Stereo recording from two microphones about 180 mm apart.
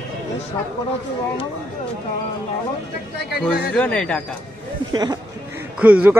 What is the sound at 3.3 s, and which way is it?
Speech, 60° left (ahead or behind).